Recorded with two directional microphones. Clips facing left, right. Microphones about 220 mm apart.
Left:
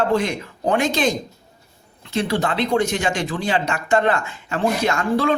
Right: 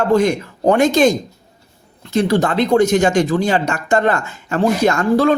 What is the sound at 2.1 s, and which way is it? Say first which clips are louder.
Speech: right 6 dB; 45° right (ahead or behind).